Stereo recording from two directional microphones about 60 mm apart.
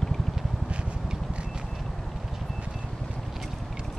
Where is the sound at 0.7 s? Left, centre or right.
Centre.